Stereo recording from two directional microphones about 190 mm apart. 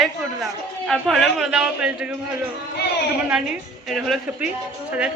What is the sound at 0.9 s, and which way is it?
A man's voice, centre (ahead or behind).